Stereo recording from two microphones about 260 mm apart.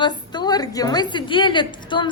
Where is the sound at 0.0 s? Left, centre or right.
Centre.